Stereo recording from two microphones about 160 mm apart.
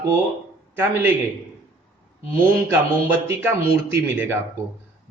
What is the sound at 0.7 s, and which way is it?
Speech, 15° right (ahead or behind).